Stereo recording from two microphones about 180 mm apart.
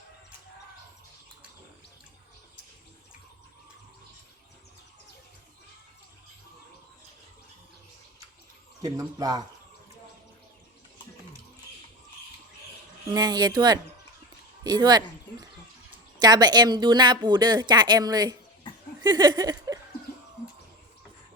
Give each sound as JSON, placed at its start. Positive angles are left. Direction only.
{"t": 8.8, "sound": "speech", "side_deg": -20}
{"t": 13.1, "sound": "speech", "side_deg": -20}
{"t": 14.6, "sound": "a sound", "side_deg": -20}
{"t": 16.1, "sound": "speech", "side_deg": -20}
{"t": 19.0, "sound": "laughter", "side_deg": -25}